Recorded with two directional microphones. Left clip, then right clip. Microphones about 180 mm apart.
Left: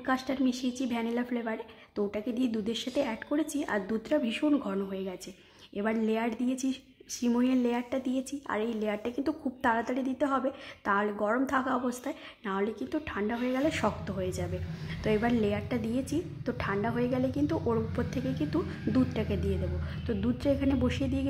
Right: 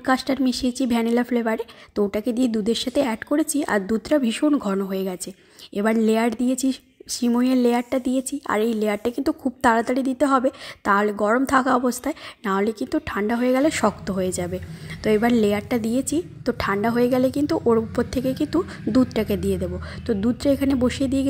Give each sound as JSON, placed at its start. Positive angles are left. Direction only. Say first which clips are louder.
{"t": 0.0, "sound": "a woman's voice", "louder": "right 9 dB", "side_deg": -35}